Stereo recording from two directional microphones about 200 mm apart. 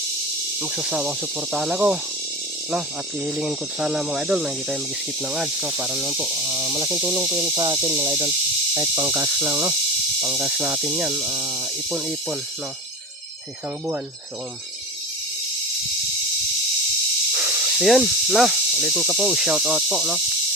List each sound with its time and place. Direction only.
0.6 s speech: 5° right (ahead or behind)
3.2 s speech: 10° right (ahead or behind)
11.9 s speech: 5° right (ahead or behind)
17.3 s speech: 5° right (ahead or behind)